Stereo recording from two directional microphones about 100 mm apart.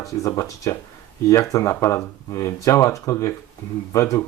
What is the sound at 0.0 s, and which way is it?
Speech, 30° left (ahead or behind).